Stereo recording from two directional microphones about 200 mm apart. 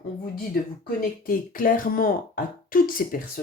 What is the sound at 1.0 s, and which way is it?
Speech, 45° left (ahead or behind).